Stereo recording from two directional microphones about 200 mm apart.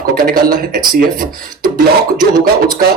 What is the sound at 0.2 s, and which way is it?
Speech, 45° right (ahead or behind).